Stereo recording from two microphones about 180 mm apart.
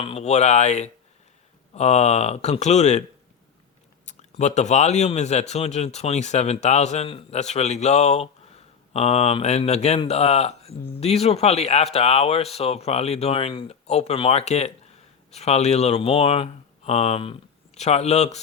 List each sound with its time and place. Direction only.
0.0 s a man's voice: 35° left (ahead or behind)
4.0 s a man's voice: 40° left (ahead or behind)